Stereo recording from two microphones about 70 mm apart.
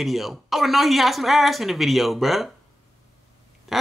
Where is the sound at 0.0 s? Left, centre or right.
Centre.